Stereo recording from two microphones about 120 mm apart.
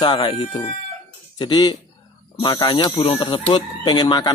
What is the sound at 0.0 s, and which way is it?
Speech, 40° left (ahead or behind).